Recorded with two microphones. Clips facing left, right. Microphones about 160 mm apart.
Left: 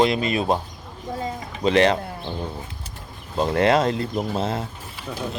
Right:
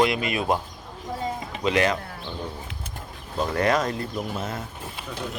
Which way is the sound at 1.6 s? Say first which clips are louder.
Left 5 dB; 30° left (ahead or behind).